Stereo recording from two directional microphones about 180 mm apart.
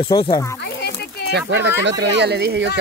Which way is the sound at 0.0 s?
25° left (ahead or behind).